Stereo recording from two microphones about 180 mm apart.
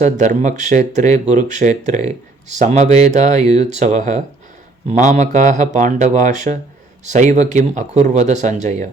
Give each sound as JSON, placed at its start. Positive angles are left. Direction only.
{"t": 0.0, "sound": "speech", "side_deg": -40}